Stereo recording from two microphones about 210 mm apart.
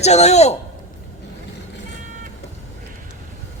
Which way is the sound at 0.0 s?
30° left (ahead or behind).